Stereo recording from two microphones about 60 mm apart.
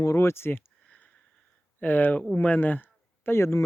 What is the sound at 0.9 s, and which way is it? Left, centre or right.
Sniff, left.